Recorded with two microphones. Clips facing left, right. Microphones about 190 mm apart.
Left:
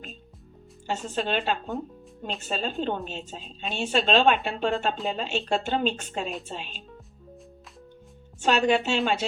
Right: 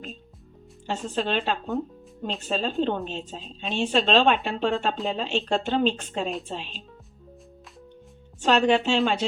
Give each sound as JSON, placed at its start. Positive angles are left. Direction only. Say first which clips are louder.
{"t": 0.9, "sound": "a woman's voice", "louder": "right 1 dB", "side_deg": 0}
{"t": 8.4, "sound": "a woman's voice", "louder": "right 2 dB", "side_deg": 5}